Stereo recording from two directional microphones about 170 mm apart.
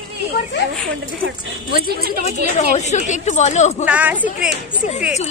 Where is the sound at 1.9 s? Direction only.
65° right (ahead or behind).